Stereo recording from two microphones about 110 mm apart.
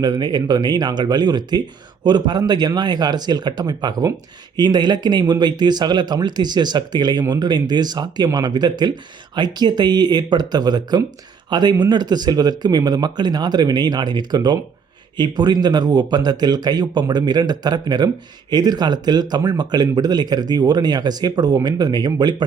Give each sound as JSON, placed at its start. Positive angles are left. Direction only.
{"t": 0.0, "sound": "speech", "side_deg": -40}